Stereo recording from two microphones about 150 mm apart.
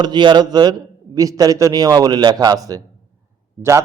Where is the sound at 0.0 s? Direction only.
30° right (ahead or behind).